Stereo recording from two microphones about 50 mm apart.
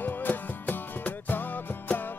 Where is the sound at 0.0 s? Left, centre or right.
Left.